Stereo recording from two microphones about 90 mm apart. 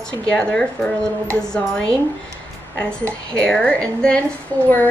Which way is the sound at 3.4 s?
10° left (ahead or behind).